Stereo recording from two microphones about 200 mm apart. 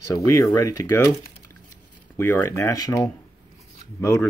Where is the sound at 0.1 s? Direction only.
15° left (ahead or behind).